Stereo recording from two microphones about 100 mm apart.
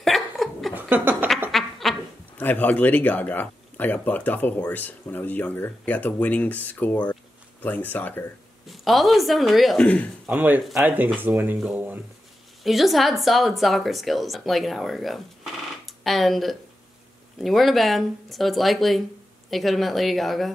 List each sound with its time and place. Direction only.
0.0 s chuckle: centre (ahead or behind)
0.7 s a sound: 20° right (ahead or behind)
1.5 s duck: centre (ahead or behind)
2.3 s speech: 15° left (ahead or behind)
8.6 s a woman's voice: centre (ahead or behind)
10.2 s speech: 15° right (ahead or behind)
12.6 s a woman's voice: centre (ahead or behind)